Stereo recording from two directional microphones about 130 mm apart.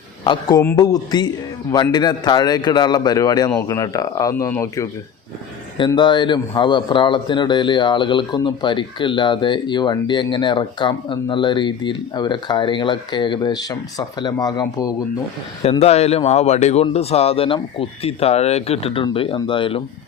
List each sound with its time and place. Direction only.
0.3 s speech: 30° left (ahead or behind)
6.0 s speech: 35° left (ahead or behind)
15.8 s a man's voice: 50° left (ahead or behind)